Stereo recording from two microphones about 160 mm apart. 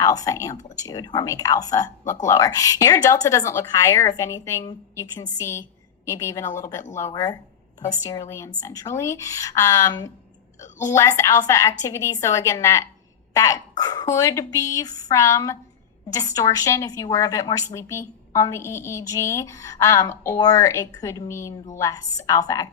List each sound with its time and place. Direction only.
0.0 s speech: 20° left (ahead or behind)